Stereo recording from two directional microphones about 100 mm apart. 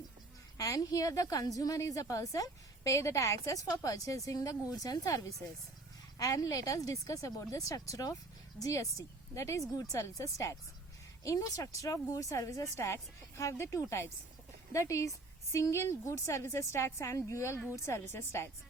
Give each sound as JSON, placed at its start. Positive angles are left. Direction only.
{"t": 0.5, "sound": "a woman's voice", "side_deg": 35}